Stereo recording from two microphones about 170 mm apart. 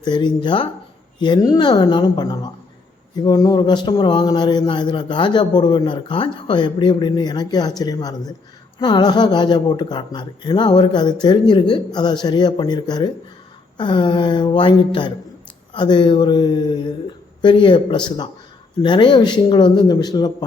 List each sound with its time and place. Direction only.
0.0 s a man's voice: 25° left (ahead or behind)